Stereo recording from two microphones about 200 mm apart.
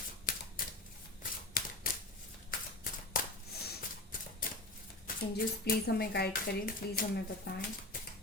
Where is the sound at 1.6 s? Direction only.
50° left (ahead or behind).